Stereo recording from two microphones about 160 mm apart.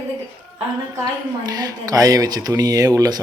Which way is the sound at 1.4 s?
25° right (ahead or behind).